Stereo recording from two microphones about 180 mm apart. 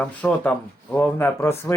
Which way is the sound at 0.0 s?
10° left (ahead or behind).